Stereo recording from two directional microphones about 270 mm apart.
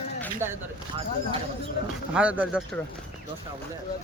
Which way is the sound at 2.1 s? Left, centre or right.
Centre.